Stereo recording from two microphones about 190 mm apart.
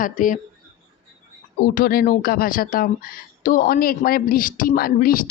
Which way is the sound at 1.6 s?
50° left (ahead or behind).